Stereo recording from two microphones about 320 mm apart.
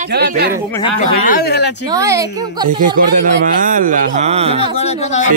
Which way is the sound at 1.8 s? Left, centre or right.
Centre.